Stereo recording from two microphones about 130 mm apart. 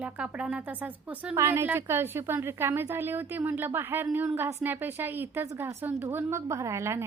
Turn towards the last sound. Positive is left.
turn(degrees=-20)  # may be behind; listen again after turning